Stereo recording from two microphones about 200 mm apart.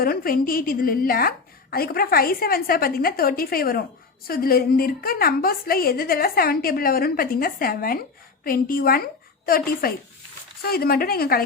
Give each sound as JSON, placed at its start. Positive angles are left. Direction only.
{"t": 0.0, "sound": "a woman's voice", "side_deg": 45}